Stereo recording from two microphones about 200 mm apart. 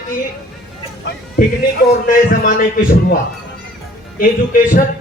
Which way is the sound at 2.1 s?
45° left (ahead or behind).